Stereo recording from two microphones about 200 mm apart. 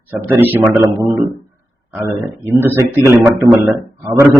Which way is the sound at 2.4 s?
10° right (ahead or behind).